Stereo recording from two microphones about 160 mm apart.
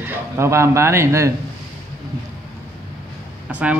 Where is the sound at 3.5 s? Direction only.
10° right (ahead or behind).